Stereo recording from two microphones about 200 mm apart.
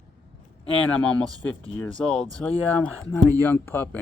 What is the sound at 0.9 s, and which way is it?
A man's voice, 5° left (ahead or behind).